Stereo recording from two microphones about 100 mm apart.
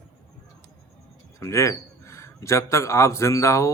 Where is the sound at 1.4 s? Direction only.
30° left (ahead or behind).